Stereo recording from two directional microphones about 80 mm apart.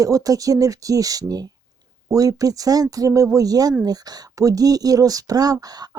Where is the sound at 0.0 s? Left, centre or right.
Right.